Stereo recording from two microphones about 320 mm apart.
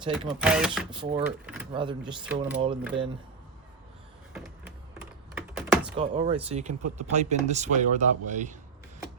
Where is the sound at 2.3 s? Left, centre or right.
Centre.